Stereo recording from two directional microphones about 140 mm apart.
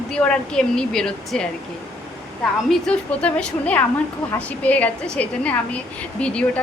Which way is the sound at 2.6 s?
5° left (ahead or behind).